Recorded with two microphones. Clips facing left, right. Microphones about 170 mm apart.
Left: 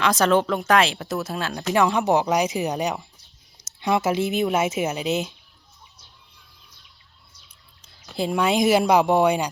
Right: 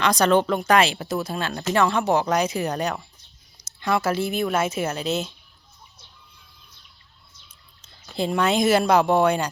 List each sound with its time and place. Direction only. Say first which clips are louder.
0.0 s speech: even; 5° left (ahead or behind)
1.7 s speech: left 1 dB; 15° left (ahead or behind)
8.0 s speech: even; 5° left (ahead or behind)